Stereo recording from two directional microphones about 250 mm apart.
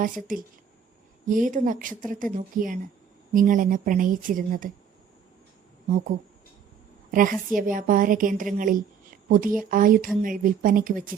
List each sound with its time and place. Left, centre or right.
1.3 s speech: right
7.1 s a woman's voice: right